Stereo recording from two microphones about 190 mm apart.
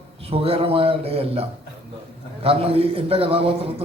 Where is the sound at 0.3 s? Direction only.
30° right (ahead or behind).